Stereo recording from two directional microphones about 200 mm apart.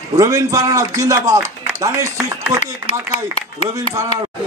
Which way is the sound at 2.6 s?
30° left (ahead or behind).